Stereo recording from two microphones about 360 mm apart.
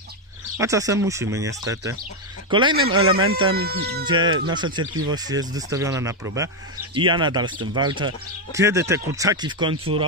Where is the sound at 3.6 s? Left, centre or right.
Right.